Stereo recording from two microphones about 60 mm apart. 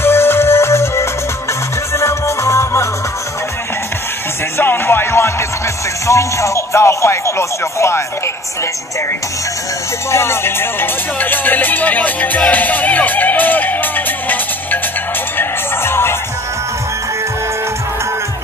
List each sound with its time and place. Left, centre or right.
0.0 s music: left
4.6 s music: left
6.0 s speech: left
10.1 s speech: left
15.3 s music: left